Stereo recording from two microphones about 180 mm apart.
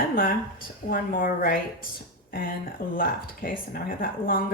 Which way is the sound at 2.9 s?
50° left (ahead or behind).